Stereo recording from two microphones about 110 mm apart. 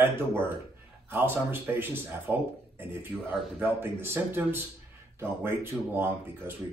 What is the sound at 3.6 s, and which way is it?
Speech, 20° right (ahead or behind).